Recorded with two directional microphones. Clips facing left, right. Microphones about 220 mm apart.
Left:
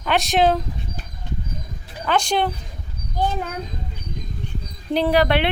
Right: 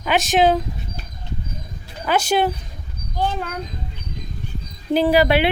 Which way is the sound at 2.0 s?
5° right (ahead or behind).